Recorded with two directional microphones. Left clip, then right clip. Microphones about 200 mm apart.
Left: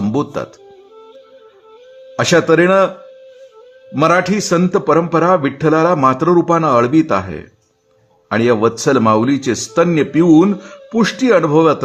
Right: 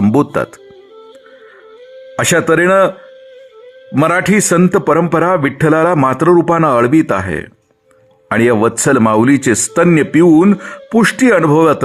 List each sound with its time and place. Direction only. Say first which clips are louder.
0.0 s speech: right 6 dB; 25° right (ahead or behind)
2.1 s a man's voice: even; 20° right (ahead or behind)
3.9 s a man's voice: right 1 dB; 20° right (ahead or behind)
6.2 s a man's voice: right 3 dB; 30° right (ahead or behind)
6.5 s a man's voice: right 2 dB; 20° right (ahead or behind)
10.3 s a man's voice: right 1 dB; 15° right (ahead or behind)
10.6 s a man's voice: right 4 dB; 30° right (ahead or behind)
11.3 s a man's voice: even; 15° right (ahead or behind)